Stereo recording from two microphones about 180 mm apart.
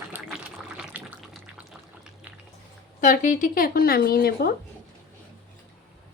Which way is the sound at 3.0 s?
45° left (ahead or behind).